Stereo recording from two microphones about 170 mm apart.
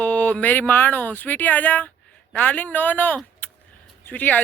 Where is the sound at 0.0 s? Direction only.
10° left (ahead or behind).